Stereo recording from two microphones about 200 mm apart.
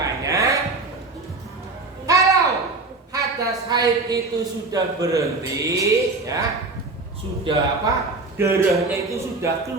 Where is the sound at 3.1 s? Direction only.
15° right (ahead or behind).